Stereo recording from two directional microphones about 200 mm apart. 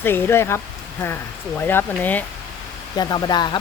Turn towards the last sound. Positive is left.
turn(degrees=20)  # may be behind; listen again after turning